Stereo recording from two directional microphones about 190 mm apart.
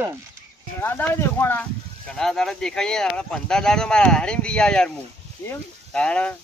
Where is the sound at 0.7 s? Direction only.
10° left (ahead or behind).